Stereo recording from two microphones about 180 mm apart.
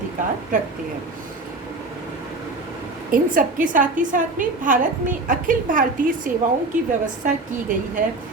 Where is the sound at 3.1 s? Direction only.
50° right (ahead or behind).